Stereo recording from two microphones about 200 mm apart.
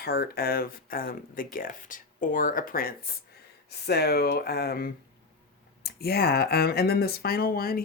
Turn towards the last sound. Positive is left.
turn(degrees=50)  # may be behind; listen again after turning